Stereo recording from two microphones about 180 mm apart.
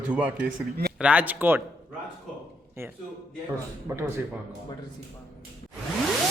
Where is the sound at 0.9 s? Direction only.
5° right (ahead or behind).